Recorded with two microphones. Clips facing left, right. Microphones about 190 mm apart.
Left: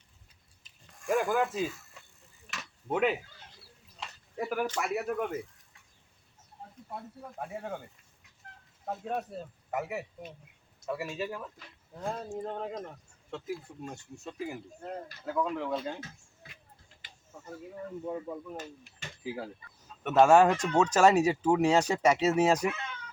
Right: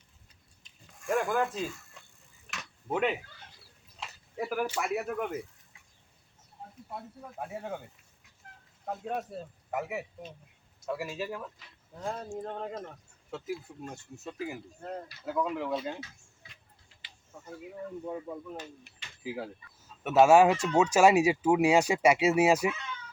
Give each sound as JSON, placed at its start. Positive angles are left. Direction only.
{"t": 0.6, "sound": "a sound", "side_deg": 0}
{"t": 4.0, "sound": "speech", "side_deg": 0}
{"t": 6.9, "sound": "speech", "side_deg": -5}
{"t": 8.9, "sound": "speech", "side_deg": 0}
{"t": 16.4, "sound": "a sound", "side_deg": 50}
{"t": 19.2, "sound": "speech", "side_deg": 0}